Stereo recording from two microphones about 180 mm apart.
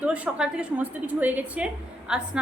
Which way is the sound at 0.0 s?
5° right (ahead or behind).